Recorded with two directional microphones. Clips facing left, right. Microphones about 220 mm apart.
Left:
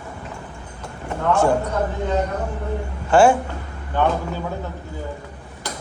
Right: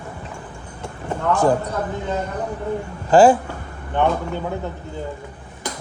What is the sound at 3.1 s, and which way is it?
Speech, 35° right (ahead or behind).